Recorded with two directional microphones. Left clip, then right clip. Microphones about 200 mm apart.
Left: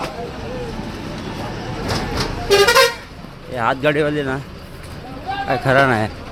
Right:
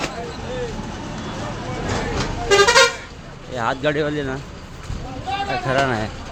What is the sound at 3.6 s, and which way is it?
Speech, 10° left (ahead or behind).